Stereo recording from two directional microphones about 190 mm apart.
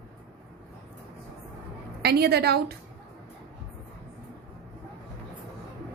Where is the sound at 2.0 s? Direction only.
55° right (ahead or behind).